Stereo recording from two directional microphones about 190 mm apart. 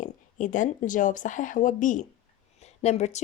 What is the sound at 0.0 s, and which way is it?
A woman's voice, 40° left (ahead or behind).